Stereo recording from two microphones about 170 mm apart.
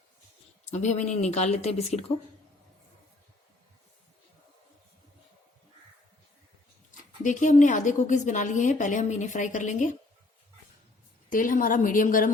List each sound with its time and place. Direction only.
0.6 s speech: 40° left (ahead or behind)
7.2 s a woman's voice: 45° left (ahead or behind)
11.3 s a woman's voice: 55° left (ahead or behind)